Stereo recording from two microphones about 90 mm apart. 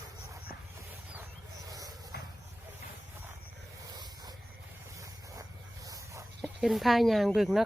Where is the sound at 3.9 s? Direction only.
50° right (ahead or behind).